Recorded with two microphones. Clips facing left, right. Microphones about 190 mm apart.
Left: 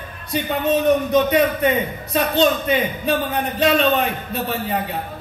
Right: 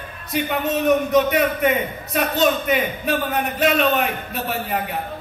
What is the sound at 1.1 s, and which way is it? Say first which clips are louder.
A man's voice: left 1 dB; 30° left (ahead or behind).